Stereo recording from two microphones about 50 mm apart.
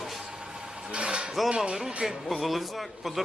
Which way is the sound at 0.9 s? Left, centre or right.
Right.